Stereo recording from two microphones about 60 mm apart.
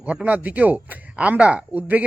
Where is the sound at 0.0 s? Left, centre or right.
Right.